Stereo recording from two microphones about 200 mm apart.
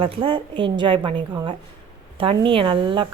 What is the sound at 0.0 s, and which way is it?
A woman's voice, 25° right (ahead or behind).